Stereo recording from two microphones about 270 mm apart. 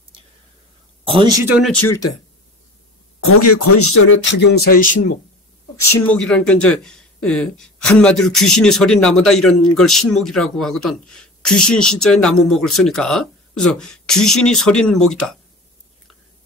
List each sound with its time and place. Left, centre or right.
1.0 s a sound: centre
1.4 s speech: centre
3.3 s speech: left
5.8 s speech: centre